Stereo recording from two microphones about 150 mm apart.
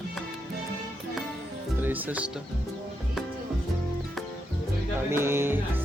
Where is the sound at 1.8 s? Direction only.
10° right (ahead or behind).